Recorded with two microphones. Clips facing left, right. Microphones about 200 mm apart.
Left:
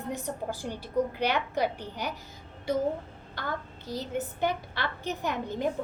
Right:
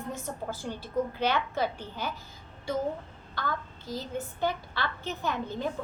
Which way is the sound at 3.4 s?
20° left (ahead or behind).